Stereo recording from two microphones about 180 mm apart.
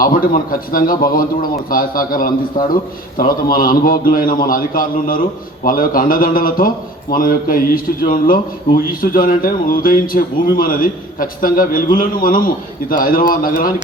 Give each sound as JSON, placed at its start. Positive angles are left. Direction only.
{"t": 0.0, "sound": "speech", "side_deg": 50}